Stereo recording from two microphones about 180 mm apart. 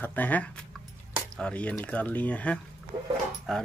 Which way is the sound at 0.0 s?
10° left (ahead or behind).